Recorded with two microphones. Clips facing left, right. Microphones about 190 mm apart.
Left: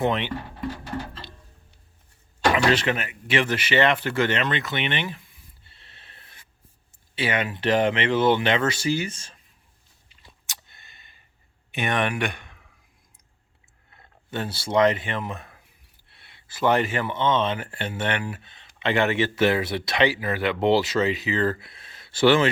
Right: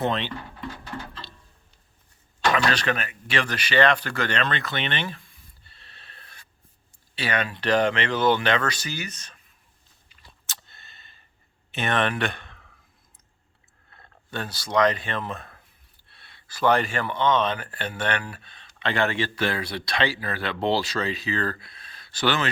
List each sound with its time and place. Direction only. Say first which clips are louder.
0.0 s speech: left 2 dB; 15° left (ahead or behind)
2.6 s speech: left 3 dB; 20° left (ahead or behind)
10.1 s a sound: right 1 dB; 20° left (ahead or behind)
11.7 s speech: even; 15° left (ahead or behind)
13.9 s speech: left 2 dB; 20° left (ahead or behind)